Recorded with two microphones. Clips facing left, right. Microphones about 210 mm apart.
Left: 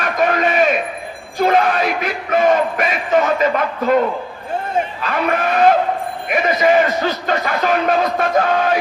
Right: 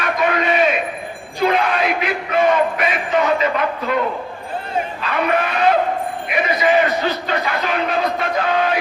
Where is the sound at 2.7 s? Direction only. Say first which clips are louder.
Left 2 dB; 50° left (ahead or behind).